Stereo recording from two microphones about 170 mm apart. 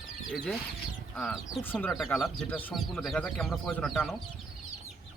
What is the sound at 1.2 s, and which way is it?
Speech, 10° left (ahead or behind).